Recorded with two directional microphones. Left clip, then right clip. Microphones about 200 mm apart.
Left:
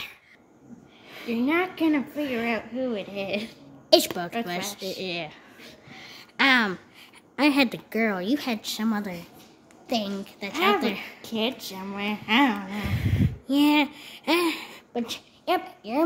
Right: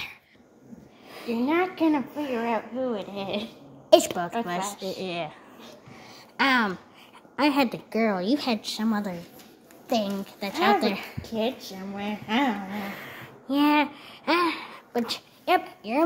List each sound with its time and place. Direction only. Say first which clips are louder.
1.3 s a woman's voice: even; 20° left (ahead or behind)
4.9 s a sound: even; 10° left (ahead or behind)
7.3 s a woman's voice: left 1 dB; 20° left (ahead or behind); by 11.2 s 5° right (ahead or behind)
11.2 s speech: even; 35° left (ahead or behind)
12.9 s speech: left 7 dB; 20° left (ahead or behind)
15.0 s speech: right 3 dB; centre (ahead or behind)